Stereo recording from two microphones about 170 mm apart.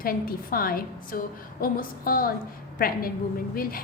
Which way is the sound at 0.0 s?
60° left (ahead or behind).